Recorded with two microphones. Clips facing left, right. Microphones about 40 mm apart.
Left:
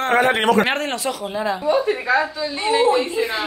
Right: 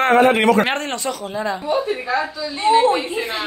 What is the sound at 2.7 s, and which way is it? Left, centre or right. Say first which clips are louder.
Speech: right 2 dB; right.